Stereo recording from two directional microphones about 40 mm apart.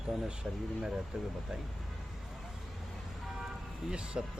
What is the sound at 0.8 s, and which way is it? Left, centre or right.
Speech, centre.